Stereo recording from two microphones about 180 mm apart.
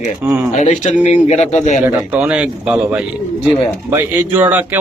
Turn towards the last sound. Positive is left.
turn(degrees=-10)  # may be behind; listen again after turning